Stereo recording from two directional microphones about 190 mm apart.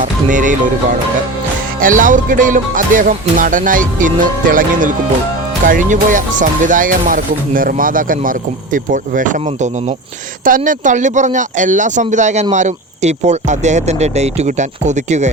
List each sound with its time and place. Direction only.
0.0 s music: 40° right (ahead or behind)
10.4 s speech: 45° right (ahead or behind)